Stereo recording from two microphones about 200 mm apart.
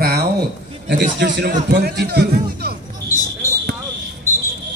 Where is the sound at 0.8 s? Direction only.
55° right (ahead or behind).